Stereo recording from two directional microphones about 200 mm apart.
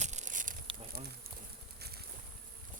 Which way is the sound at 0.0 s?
35° right (ahead or behind).